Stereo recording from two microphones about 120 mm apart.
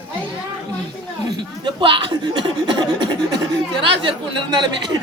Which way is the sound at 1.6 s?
45° right (ahead or behind).